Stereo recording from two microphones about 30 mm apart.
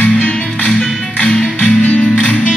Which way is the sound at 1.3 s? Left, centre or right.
Left.